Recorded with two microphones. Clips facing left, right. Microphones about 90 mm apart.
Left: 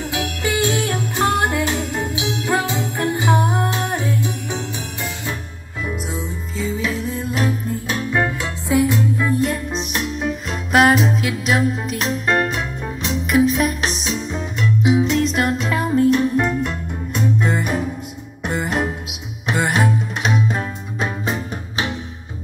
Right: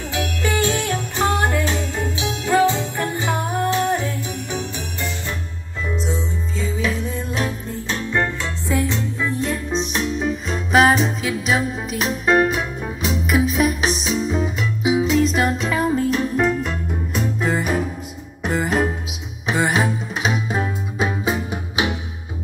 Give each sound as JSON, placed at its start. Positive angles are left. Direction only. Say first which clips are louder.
{"t": 0.1, "sound": "music", "louder": "right 2 dB", "side_deg": 15}
{"t": 6.0, "sound": "music", "louder": "right 2 dB", "side_deg": 5}